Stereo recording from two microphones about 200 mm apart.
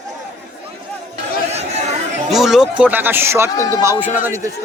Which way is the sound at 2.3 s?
Centre (ahead or behind).